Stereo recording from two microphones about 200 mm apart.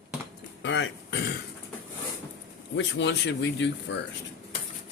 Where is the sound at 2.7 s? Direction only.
60° left (ahead or behind).